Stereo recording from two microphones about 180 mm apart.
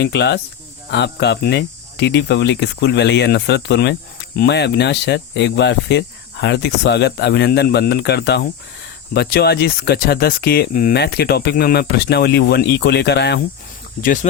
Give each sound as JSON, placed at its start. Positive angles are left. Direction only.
{"t": 0.0, "sound": "speech", "side_deg": 70}
{"t": 10.9, "sound": "speech", "side_deg": 65}
{"t": 14.0, "sound": "speech", "side_deg": 45}